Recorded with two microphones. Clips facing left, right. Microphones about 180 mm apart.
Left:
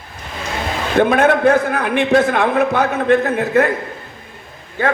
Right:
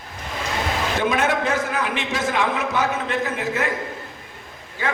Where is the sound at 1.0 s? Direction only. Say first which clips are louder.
Left 10 dB; 60° left (ahead or behind).